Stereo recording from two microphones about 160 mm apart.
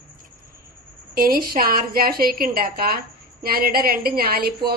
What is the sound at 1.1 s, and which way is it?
A woman's voice, 65° right (ahead or behind).